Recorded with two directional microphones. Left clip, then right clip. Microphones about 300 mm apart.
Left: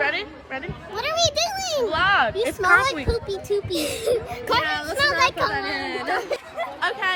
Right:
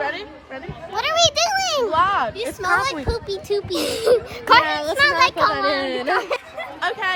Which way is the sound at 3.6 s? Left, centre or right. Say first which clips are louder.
Right 5 dB; centre.